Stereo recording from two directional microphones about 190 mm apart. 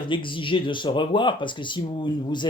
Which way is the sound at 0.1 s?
25° left (ahead or behind).